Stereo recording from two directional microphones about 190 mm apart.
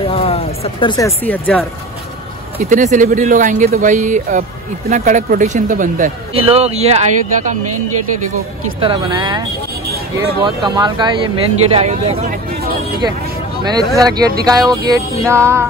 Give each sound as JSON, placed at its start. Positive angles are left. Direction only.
{"t": 0.0, "sound": "speech", "side_deg": 30}
{"t": 2.6, "sound": "speech", "side_deg": -40}
{"t": 6.3, "sound": "speech", "side_deg": -30}
{"t": 8.8, "sound": "speech", "side_deg": -25}
{"t": 11.7, "sound": "speech", "side_deg": -35}
{"t": 13.7, "sound": "speech", "side_deg": -20}
{"t": 14.7, "sound": "music", "side_deg": -15}